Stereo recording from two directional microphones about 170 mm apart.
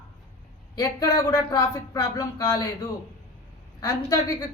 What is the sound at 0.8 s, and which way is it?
A woman's voice, 20° left (ahead or behind).